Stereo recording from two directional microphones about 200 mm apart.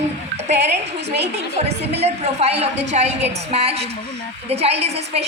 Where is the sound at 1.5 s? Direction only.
30° right (ahead or behind).